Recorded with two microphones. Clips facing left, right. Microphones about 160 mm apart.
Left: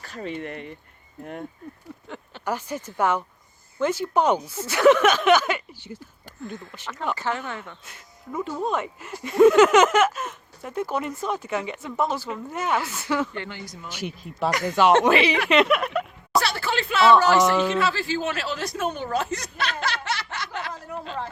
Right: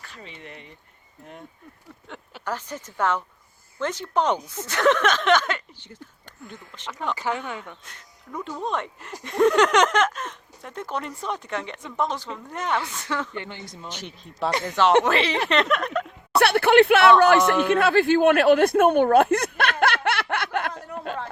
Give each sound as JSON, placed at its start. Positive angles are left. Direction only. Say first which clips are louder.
{"t": 0.0, "sound": "speech", "louder": "left 11 dB", "side_deg": 45}
{"t": 2.0, "sound": "a sound", "louder": "even", "side_deg": 0}
{"t": 2.5, "sound": "speech", "louder": "left 3 dB", "side_deg": 10}
{"t": 7.2, "sound": "speech", "louder": "even", "side_deg": -15}
{"t": 7.9, "sound": "speech", "louder": "left 4 dB", "side_deg": 5}
{"t": 13.3, "sound": "speech", "louder": "even", "side_deg": -20}
{"t": 13.8, "sound": "speech", "louder": "left 8 dB", "side_deg": 10}
{"t": 14.5, "sound": "speech", "louder": "left 1 dB", "side_deg": -25}
{"t": 15.0, "sound": "speech", "louder": "left 3 dB", "side_deg": 10}
{"t": 16.4, "sound": "speech", "louder": "right 14 dB", "side_deg": -60}
{"t": 21.1, "sound": "a sound", "louder": "right 1 dB", "side_deg": -50}